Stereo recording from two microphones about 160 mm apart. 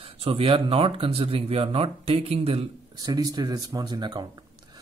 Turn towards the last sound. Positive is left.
turn(degrees=-30)  # may be behind; listen again after turning